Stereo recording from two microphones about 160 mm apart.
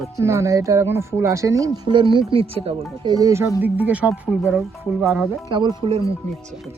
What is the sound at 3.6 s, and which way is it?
Speech, 10° right (ahead or behind).